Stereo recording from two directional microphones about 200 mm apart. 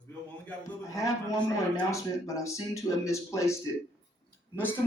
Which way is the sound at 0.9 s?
15° left (ahead or behind).